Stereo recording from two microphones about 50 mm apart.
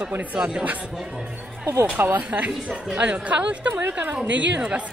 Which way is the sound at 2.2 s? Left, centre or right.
Right.